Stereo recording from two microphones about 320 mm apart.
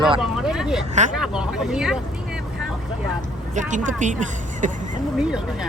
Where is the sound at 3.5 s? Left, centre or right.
Right.